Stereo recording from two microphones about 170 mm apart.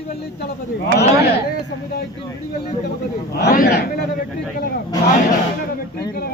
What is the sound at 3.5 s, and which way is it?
Speech, 55° left (ahead or behind).